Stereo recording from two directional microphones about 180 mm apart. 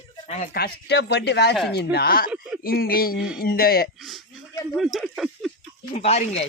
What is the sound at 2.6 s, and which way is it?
Speech, 55° left (ahead or behind).